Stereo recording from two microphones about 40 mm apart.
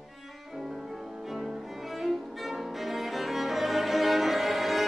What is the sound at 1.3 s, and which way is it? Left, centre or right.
Cello, centre.